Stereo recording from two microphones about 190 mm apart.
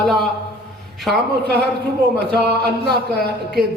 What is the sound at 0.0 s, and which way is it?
A man's voice, centre (ahead or behind).